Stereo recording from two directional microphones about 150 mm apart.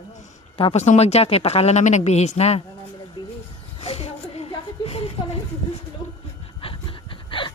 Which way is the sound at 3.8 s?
40° left (ahead or behind).